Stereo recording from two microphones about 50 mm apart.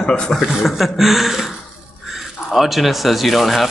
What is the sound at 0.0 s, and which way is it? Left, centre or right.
Speech, centre.